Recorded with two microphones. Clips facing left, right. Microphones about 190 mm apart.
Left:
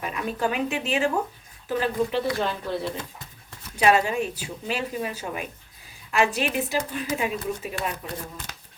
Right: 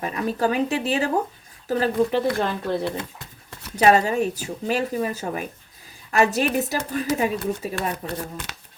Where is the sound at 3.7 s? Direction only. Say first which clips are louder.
Right 3 dB; 40° right (ahead or behind).